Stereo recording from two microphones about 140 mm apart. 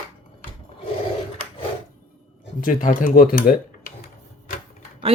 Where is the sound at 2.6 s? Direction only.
70° left (ahead or behind); by 3.9 s 90° left.